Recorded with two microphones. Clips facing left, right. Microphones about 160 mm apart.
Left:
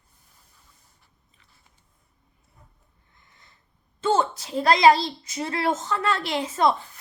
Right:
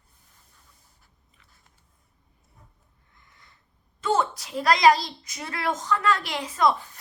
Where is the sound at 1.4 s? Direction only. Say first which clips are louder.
Right 1 dB; 30° left (ahead or behind).